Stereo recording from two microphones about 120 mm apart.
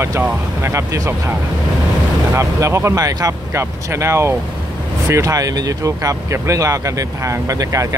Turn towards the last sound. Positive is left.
turn(degrees=-30)  # may be behind; listen again after turning